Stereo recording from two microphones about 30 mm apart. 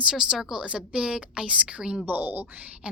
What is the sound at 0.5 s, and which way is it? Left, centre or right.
A woman's voice, right.